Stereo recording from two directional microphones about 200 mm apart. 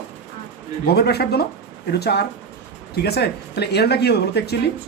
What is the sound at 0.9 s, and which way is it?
Speech, 55° left (ahead or behind).